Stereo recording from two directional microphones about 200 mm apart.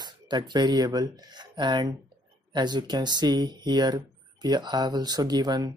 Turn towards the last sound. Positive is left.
turn(degrees=-20)  # may be behind; listen again after turning